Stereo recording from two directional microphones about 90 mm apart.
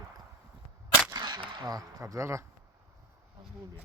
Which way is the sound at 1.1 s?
50° right (ahead or behind).